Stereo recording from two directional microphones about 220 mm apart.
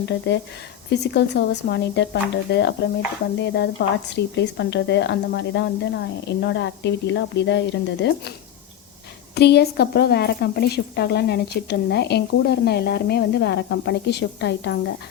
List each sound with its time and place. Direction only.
0.3 s speech: 55° left (ahead or behind)
9.3 s speech: 50° left (ahead or behind)